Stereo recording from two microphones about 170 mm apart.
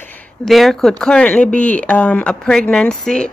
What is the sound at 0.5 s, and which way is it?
Speech, centre (ahead or behind).